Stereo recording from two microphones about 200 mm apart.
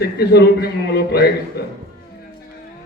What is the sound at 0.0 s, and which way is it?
A man's voice, 55° left (ahead or behind).